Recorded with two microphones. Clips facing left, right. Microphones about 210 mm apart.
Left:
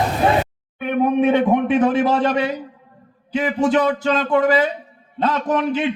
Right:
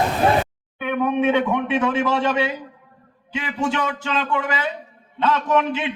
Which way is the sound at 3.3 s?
40° left (ahead or behind).